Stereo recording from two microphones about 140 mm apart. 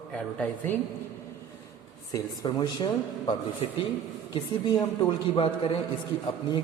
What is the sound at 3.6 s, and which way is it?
Speech, 40° left (ahead or behind).